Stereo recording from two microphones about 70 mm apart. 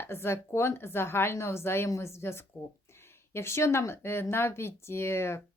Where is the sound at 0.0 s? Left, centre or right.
Left.